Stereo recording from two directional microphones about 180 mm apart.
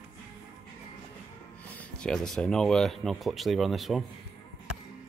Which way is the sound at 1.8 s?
5° left (ahead or behind).